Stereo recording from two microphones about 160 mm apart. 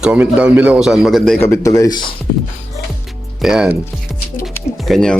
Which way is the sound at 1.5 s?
20° left (ahead or behind).